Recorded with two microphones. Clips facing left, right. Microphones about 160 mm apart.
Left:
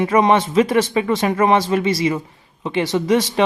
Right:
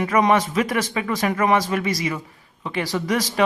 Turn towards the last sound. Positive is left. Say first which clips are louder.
# left 6 dB
turn(degrees=25)  # may be behind; listen again after turning